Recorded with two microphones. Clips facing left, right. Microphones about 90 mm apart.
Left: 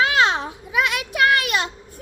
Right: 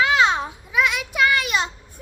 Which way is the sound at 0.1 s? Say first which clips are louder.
Right 1 dB; 60° left (ahead or behind).